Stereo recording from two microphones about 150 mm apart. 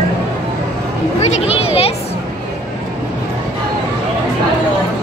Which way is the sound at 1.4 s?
40° left (ahead or behind).